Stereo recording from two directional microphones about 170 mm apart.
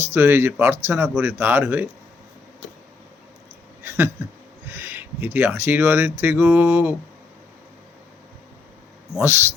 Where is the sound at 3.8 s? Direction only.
15° right (ahead or behind).